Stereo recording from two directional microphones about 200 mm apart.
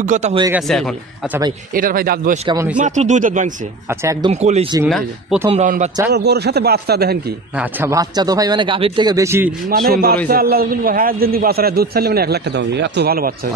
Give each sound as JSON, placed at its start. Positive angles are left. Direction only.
{"t": 0.0, "sound": "speech", "side_deg": -35}
{"t": 0.5, "sound": "speech", "side_deg": 0}
{"t": 1.7, "sound": "a man's voice", "side_deg": -45}
{"t": 2.4, "sound": "speech", "side_deg": -15}
{"t": 2.8, "sound": "speech", "side_deg": -35}
{"t": 4.0, "sound": "speech", "side_deg": -15}
{"t": 4.3, "sound": "speech", "side_deg": -35}
{"t": 4.8, "sound": "speech", "side_deg": 0}
{"t": 5.5, "sound": "speech", "side_deg": -35}
{"t": 6.1, "sound": "a man's voice", "side_deg": -55}
{"t": 7.5, "sound": "speech", "side_deg": -15}
{"t": 9.7, "sound": "a man's voice", "side_deg": -50}